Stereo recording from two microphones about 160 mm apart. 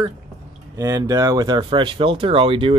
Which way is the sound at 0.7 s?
20° right (ahead or behind).